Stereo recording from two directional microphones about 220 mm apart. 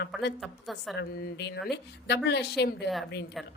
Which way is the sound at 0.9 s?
50° left (ahead or behind).